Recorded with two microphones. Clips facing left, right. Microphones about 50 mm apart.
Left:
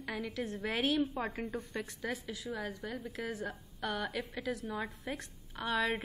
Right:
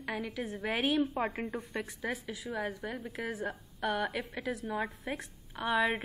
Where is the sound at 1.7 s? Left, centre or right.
Centre.